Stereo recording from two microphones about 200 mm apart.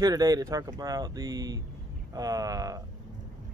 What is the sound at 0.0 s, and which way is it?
Speech, 20° right (ahead or behind).